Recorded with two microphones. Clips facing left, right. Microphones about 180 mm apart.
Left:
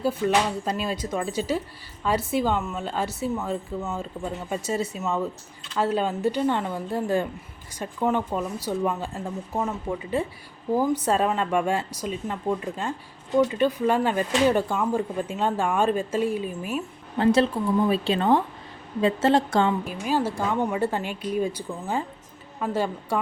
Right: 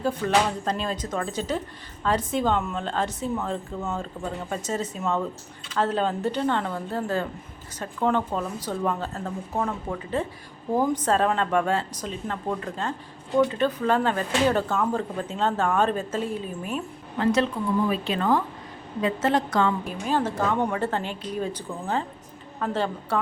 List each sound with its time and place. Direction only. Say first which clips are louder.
0.2 s speech: right 1 dB; 10° left (ahead or behind)
17.2 s a woman's voice: left 3 dB; 30° left (ahead or behind)
20.1 s speech: even; 10° left (ahead or behind)